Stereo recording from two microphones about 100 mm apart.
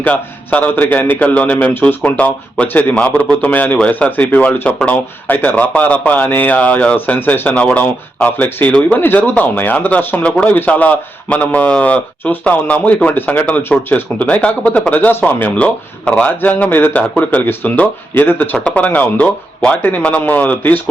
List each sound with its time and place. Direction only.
0.0 s a man's voice: 15° left (ahead or behind)